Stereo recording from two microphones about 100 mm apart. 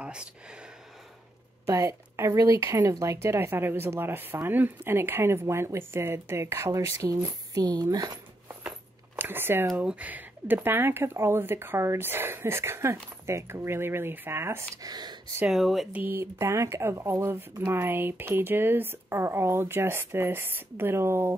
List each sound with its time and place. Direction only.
0.0 s a sound: 10° right (ahead or behind)
1.7 s speech: 30° right (ahead or behind)
9.2 s speech: 20° right (ahead or behind)
14.8 s speech: 40° right (ahead or behind)
15.4 s speech: centre (ahead or behind)
15.9 s speech: 20° right (ahead or behind)